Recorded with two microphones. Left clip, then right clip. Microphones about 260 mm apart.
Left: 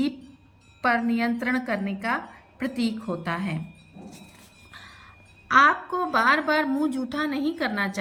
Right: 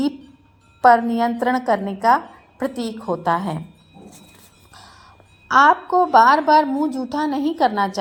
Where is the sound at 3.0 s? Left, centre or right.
Right.